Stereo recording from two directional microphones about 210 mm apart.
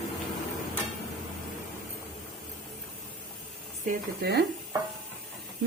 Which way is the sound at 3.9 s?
50° right (ahead or behind).